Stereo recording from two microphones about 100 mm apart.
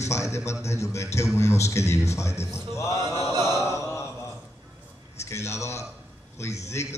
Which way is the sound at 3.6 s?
30° left (ahead or behind).